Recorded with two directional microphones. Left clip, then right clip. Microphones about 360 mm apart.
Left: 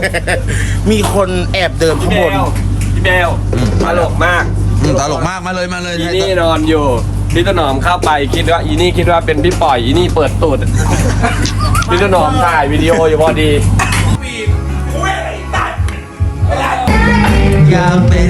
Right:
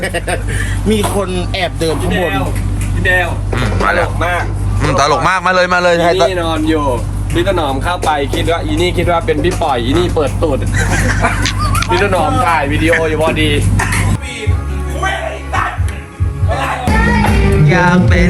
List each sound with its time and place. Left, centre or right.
0.0 s speech: centre
3.6 s speech: centre
11.7 s chicken: centre
12.3 s speech: centre
12.6 s speech: left
13.6 s a sound: centre
16.8 s music: centre